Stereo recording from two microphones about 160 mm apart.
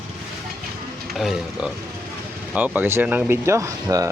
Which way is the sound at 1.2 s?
Centre (ahead or behind).